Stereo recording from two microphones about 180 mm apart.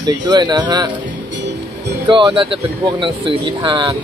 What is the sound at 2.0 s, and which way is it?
Speech, 25° right (ahead or behind).